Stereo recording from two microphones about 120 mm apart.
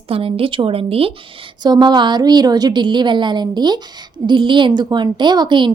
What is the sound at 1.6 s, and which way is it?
A woman's voice, 35° right (ahead or behind).